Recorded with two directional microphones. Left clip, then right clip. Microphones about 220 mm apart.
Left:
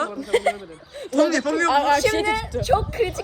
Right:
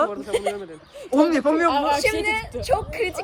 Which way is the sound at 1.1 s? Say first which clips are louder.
Right 1 dB; 20° right (ahead or behind).